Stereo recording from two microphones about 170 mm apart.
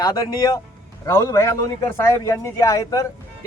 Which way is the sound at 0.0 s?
20° left (ahead or behind).